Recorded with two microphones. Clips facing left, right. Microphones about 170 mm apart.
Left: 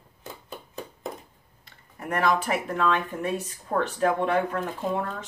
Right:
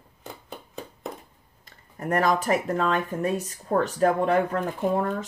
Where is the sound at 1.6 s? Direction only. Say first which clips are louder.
Right 5 dB; 45° right (ahead or behind).